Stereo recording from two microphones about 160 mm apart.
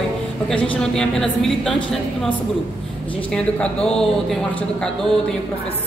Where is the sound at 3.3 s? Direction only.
5° left (ahead or behind).